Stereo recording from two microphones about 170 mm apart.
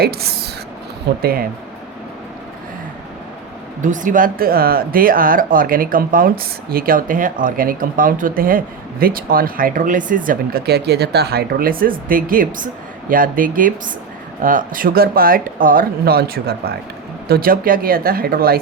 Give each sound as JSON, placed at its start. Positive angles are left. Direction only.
{"t": 0.0, "sound": "speech", "side_deg": -65}
{"t": 3.8, "sound": "speech", "side_deg": -50}